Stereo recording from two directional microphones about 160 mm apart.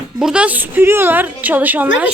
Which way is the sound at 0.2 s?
5° right (ahead or behind).